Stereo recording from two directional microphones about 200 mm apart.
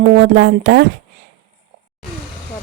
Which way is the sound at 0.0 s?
55° right (ahead or behind).